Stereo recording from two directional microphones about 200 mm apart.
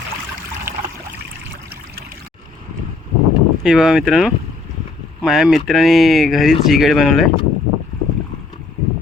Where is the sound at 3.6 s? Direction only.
Centre (ahead or behind).